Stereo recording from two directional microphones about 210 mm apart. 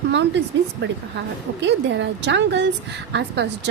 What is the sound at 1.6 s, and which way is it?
Speech, 60° right (ahead or behind).